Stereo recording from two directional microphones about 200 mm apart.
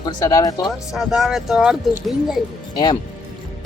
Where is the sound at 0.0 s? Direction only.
20° left (ahead or behind).